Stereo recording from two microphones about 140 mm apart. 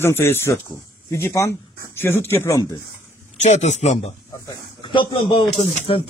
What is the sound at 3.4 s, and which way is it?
Speech, 55° left (ahead or behind).